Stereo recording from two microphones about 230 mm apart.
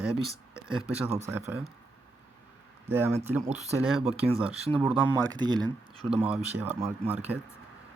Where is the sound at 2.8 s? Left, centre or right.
Centre.